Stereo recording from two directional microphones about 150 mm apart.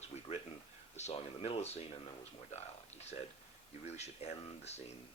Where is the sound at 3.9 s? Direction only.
45° left (ahead or behind).